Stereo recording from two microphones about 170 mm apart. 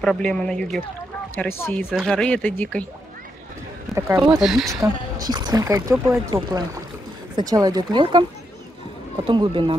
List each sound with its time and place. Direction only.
0.0 s speech: 5° left (ahead or behind)
2.0 s speech: 5° left (ahead or behind)
3.9 s a sound: centre (ahead or behind)
4.4 s speech: centre (ahead or behind)
5.2 s speech: 25° right (ahead or behind)
9.3 s speech: 30° right (ahead or behind)